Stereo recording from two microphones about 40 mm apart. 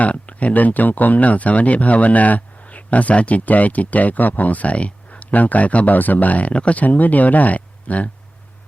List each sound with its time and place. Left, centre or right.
0.0 s speech: left
6.5 s speech: left
6.7 s speech: left